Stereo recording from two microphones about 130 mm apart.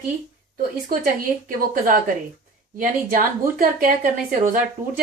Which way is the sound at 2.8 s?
90° right.